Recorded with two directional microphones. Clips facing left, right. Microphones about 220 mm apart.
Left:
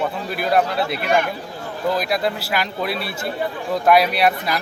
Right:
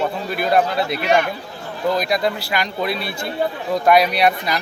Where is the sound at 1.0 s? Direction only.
50° left (ahead or behind).